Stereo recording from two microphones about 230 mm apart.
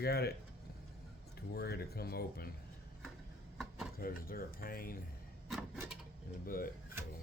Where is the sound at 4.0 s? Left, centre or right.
Left.